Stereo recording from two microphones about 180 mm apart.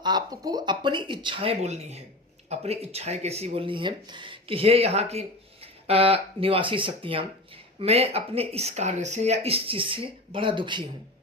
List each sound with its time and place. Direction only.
0.0 s speech: 25° right (ahead or behind)